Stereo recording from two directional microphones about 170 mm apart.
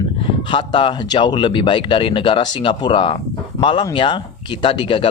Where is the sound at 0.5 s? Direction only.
30° left (ahead or behind).